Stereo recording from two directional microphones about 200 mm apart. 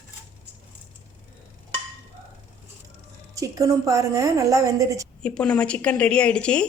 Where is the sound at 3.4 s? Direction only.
15° right (ahead or behind).